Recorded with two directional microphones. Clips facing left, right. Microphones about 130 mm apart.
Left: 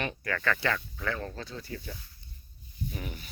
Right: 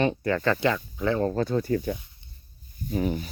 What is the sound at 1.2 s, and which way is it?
Speech, 35° right (ahead or behind).